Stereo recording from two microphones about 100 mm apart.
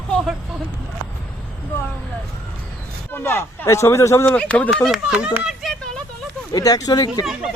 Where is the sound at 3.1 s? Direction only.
20° left (ahead or behind).